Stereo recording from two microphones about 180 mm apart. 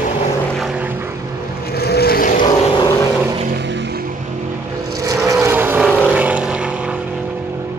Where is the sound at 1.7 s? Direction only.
60° left (ahead or behind).